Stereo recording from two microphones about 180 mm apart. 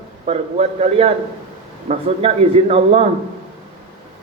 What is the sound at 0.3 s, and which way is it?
A man's voice, 35° right (ahead or behind).